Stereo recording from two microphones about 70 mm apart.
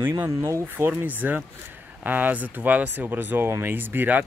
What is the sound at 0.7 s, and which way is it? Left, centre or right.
Speech, right.